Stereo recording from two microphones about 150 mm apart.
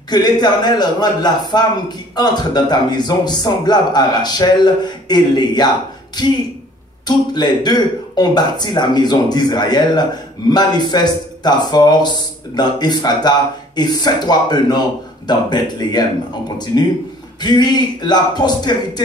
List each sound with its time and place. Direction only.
0.1 s a man's voice: 30° left (ahead or behind)
7.1 s a man's voice: 30° left (ahead or behind)